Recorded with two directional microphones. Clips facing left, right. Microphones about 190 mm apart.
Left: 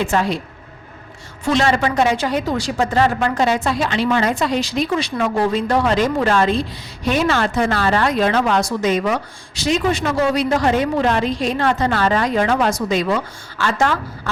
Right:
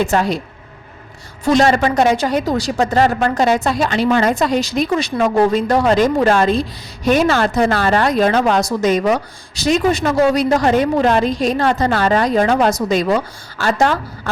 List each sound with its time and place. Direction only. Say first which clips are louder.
0.0 s speech: right 3 dB; 40° right (ahead or behind)
1.5 s speech: right 4 dB; 40° right (ahead or behind)